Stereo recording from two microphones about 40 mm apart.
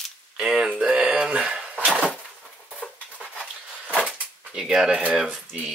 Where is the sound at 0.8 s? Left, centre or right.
Right.